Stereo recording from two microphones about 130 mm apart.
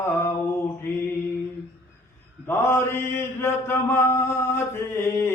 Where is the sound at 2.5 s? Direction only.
20° left (ahead or behind).